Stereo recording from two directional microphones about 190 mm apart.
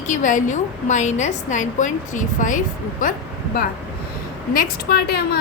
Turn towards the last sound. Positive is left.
turn(degrees=55)  # may be behind; listen again after turning